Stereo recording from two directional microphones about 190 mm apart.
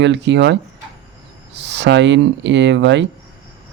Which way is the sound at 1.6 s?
65° right (ahead or behind).